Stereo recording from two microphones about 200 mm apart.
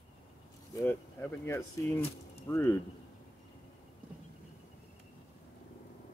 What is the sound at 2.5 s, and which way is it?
Speech, 15° left (ahead or behind).